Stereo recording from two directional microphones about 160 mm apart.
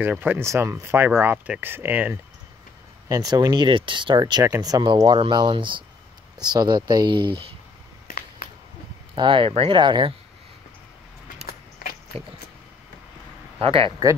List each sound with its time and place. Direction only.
0.0 s speech: 10° right (ahead or behind)
3.1 s speech: 25° right (ahead or behind)
9.1 s speech: 30° right (ahead or behind)
11.8 s a sound: 70° left (ahead or behind)
13.6 s speech: 35° right (ahead or behind)